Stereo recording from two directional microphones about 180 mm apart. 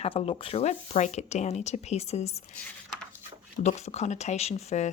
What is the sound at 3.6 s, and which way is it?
Speech, 35° left (ahead or behind).